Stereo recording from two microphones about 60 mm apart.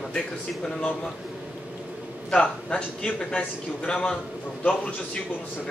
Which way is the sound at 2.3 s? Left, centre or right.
Centre.